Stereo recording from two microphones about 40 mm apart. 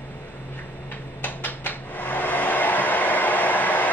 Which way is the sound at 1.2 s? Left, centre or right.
Left.